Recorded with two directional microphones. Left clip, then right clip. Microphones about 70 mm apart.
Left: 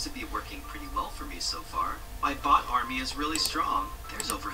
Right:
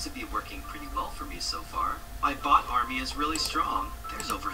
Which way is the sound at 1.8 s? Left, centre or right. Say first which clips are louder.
Right 1 dB; left.